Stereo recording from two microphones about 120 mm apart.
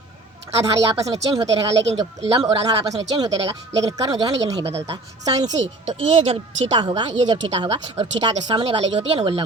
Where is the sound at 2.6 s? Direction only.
30° right (ahead or behind).